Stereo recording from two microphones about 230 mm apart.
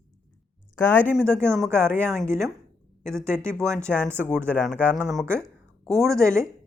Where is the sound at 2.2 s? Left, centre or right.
Centre.